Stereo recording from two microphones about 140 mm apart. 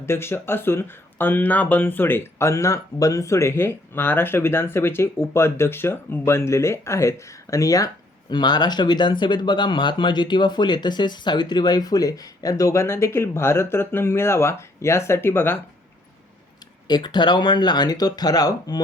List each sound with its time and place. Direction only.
0.0 s speech: 15° left (ahead or behind)
16.9 s speech: 30° left (ahead or behind)